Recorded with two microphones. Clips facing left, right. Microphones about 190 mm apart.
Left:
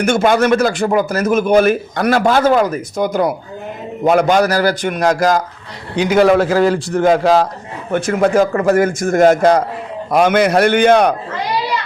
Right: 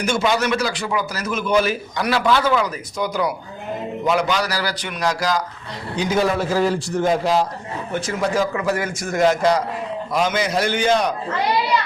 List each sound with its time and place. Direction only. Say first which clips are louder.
0.0 s speech: left 7 dB; 55° left (ahead or behind)
6.0 s a man's voice: left 8 dB; 70° left (ahead or behind)
7.9 s a man's voice: left 8 dB; 55° left (ahead or behind)